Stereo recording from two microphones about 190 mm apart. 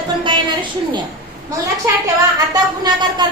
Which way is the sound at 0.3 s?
25° right (ahead or behind).